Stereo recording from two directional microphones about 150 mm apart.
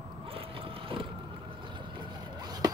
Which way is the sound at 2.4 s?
25° right (ahead or behind).